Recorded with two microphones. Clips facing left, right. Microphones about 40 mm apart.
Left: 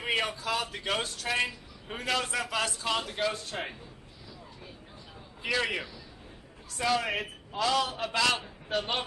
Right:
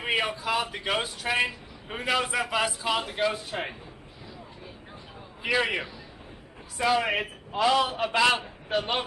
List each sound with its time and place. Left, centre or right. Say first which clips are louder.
0.0 s a man's voice: right 3 dB; centre
5.4 s a man's voice: right 4 dB; centre